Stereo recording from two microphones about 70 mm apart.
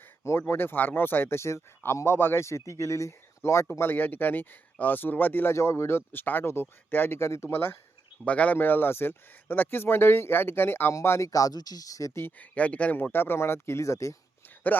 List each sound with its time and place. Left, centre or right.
0.3 s speech: left
3.7 s speech: left
8.2 s speech: left
11.3 s speech: left
12.4 s speech: left
14.4 s a sound: left